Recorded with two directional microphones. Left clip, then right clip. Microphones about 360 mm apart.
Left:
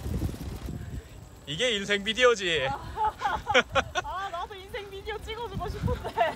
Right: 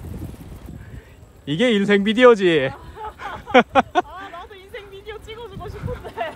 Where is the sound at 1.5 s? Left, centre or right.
Centre.